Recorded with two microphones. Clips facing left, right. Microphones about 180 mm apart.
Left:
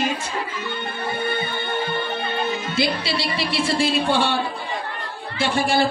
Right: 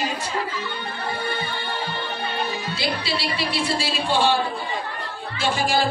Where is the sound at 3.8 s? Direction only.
60° left (ahead or behind).